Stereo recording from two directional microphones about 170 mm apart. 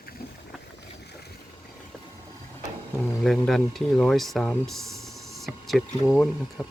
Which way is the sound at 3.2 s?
Centre (ahead or behind).